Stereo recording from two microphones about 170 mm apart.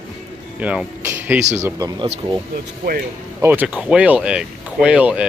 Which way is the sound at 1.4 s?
45° right (ahead or behind).